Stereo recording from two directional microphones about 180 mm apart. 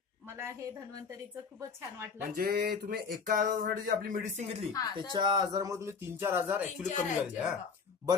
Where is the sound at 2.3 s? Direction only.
55° right (ahead or behind).